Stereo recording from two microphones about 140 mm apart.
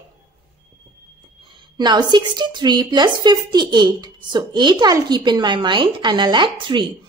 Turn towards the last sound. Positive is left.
turn(degrees=-35)  # may be behind; listen again after turning